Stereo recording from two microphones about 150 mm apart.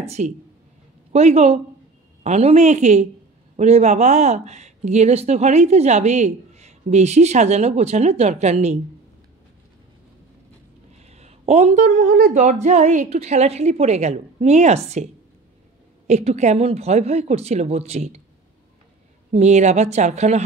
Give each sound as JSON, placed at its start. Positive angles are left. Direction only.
{"t": 0.0, "sound": "speech", "side_deg": -45}
{"t": 11.0, "sound": "speech", "side_deg": -45}
{"t": 16.1, "sound": "speech", "side_deg": -50}
{"t": 19.3, "sound": "speech", "side_deg": -50}